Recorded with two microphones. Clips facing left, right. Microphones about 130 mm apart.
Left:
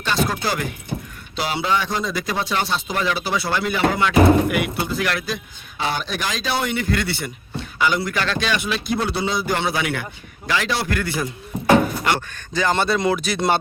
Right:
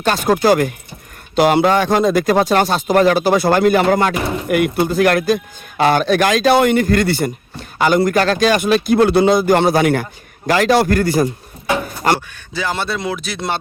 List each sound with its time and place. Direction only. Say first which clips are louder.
0.0 s speech: right 8 dB; 50° right (ahead or behind)
12.5 s speech: left 2 dB; 5° right (ahead or behind)